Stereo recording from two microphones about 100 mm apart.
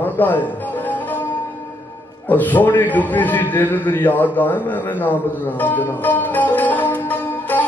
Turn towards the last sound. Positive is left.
turn(degrees=20)  # may be behind; listen again after turning